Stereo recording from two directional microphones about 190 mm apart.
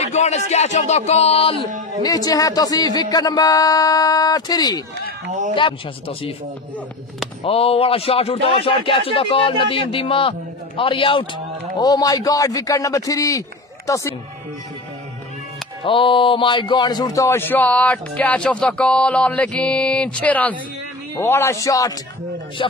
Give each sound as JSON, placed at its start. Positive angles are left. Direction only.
{"t": 0.0, "sound": "speech", "side_deg": 35}
{"t": 2.0, "sound": "speech", "side_deg": 20}
{"t": 7.4, "sound": "speech", "side_deg": 30}
{"t": 15.8, "sound": "speech", "side_deg": 25}